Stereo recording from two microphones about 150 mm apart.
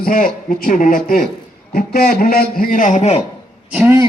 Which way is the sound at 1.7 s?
90° left.